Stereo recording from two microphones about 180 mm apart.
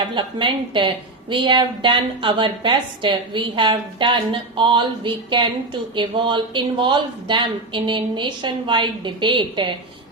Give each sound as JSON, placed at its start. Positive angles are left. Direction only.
{"t": 0.1, "sound": "a woman's voice", "side_deg": -25}